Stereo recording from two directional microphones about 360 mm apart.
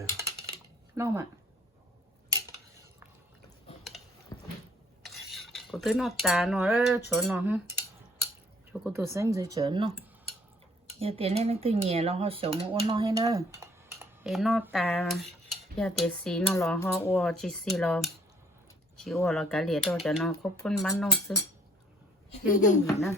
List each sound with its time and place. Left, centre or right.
0.9 s speech: centre
4.3 s a sound: centre
5.0 s cutlery: centre
7.1 s speech: centre
8.8 s speech: centre
11.0 s speech: centre
22.5 s speech: left
22.9 s speech: centre